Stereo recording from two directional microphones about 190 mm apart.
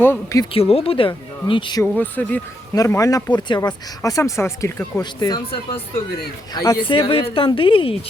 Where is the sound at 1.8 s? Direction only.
10° left (ahead or behind).